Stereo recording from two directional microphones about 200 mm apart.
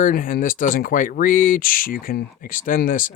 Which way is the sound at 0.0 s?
45° left (ahead or behind).